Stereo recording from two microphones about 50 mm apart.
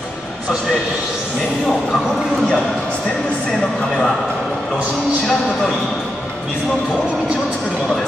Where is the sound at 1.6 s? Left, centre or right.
Centre.